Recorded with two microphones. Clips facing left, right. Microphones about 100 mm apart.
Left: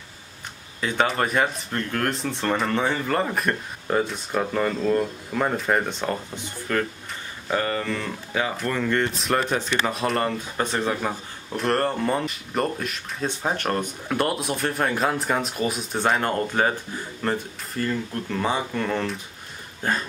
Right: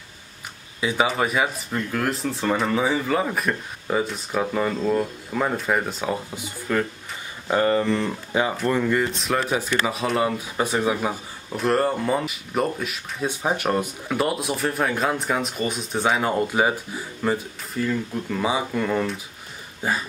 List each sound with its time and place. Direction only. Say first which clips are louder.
0.7 s speech: right 1 dB; 5° right (ahead or behind)
7.4 s speech: right 5 dB; 20° right (ahead or behind)
8.8 s speech: right 1 dB; 5° right (ahead or behind)
19.8 s a sound: even; 5° right (ahead or behind)